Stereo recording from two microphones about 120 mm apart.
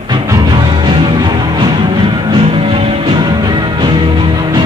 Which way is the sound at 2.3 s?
50° right (ahead or behind).